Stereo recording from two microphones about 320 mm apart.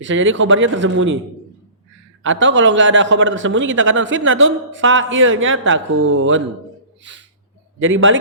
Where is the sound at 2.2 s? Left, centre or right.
Right.